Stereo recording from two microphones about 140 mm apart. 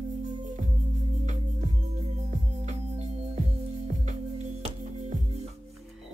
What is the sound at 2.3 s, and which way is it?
Music, 60° right (ahead or behind).